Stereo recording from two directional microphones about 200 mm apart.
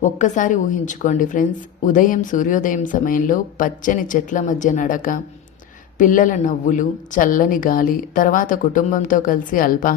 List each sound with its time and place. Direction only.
0.0 s a woman's voice: 40° left (ahead or behind)